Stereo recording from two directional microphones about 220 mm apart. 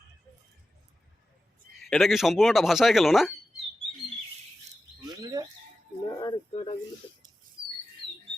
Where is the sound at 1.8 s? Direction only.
Centre (ahead or behind).